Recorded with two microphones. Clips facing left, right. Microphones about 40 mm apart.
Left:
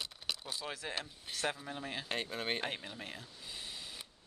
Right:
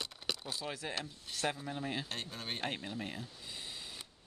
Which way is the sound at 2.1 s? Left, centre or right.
Centre.